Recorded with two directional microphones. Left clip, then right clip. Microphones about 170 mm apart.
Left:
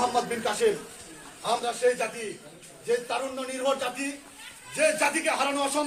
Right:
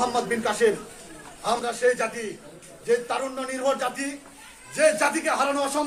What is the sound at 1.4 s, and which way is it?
Speech, 15° right (ahead or behind).